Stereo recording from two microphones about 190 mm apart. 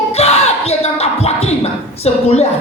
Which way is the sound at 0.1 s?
35° left (ahead or behind).